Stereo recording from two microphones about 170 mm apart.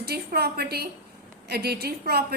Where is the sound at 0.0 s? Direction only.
65° right (ahead or behind).